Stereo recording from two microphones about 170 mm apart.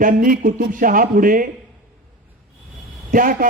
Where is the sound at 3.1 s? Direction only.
55° right (ahead or behind).